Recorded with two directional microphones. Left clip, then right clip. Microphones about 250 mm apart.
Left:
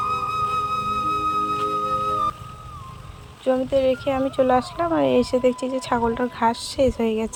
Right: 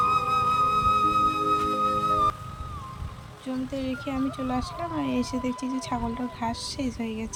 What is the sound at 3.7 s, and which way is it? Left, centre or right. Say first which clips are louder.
Speech: left 10 dB; centre.